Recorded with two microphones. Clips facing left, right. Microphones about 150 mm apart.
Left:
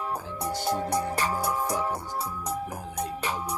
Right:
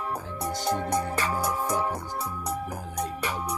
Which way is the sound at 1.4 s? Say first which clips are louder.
Right 1 dB; 50° right (ahead or behind).